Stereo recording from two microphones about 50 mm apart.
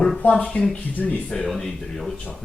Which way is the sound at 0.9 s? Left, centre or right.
Left.